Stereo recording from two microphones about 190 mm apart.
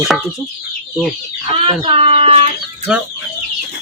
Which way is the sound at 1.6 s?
30° right (ahead or behind).